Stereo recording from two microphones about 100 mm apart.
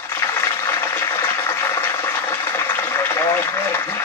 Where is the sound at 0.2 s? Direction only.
30° left (ahead or behind).